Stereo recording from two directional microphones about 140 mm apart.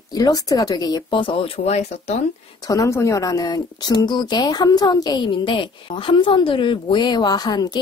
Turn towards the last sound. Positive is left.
turn(degrees=30)  # may be behind; listen again after turning